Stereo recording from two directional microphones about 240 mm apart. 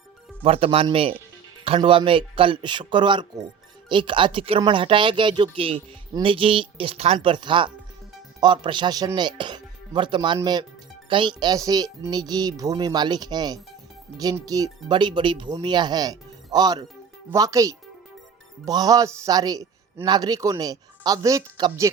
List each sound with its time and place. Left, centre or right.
0.4 s a man's voice: right